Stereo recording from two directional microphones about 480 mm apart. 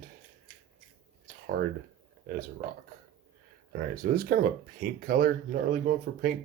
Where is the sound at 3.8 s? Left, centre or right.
Centre.